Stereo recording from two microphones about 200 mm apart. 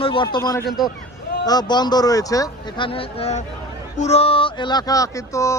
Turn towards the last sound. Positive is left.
turn(degrees=15)  # may be behind; listen again after turning